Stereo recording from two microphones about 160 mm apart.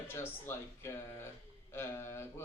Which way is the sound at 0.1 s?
15° left (ahead or behind).